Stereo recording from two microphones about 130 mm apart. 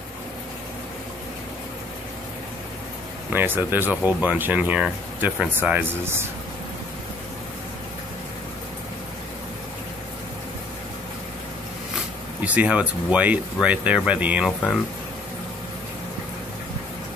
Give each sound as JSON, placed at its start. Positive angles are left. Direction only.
{"t": 3.3, "sound": "speech", "side_deg": -15}
{"t": 12.4, "sound": "speech", "side_deg": -10}